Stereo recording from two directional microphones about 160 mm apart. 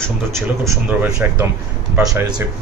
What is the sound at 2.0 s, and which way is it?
Mantra, 20° right (ahead or behind).